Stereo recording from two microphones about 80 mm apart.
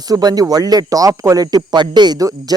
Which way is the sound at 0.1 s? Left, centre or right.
Right.